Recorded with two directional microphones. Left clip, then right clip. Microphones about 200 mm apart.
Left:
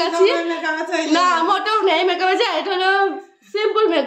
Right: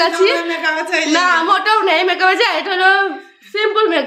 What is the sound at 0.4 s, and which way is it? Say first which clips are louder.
Speech: right 4 dB; 25° left (ahead or behind).